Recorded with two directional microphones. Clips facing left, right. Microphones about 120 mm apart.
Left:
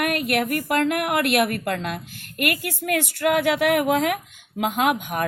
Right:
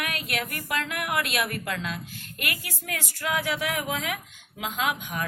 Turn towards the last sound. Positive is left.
turn(degrees=55)  # may be behind; listen again after turning